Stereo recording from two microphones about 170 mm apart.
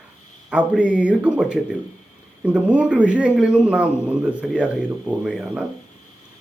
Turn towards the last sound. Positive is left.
turn(degrees=-5)  # may be behind; listen again after turning